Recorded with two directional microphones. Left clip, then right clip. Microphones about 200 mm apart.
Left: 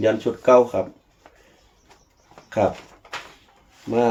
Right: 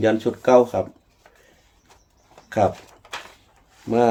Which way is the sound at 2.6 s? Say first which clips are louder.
Right 1 dB; 45° right (ahead or behind).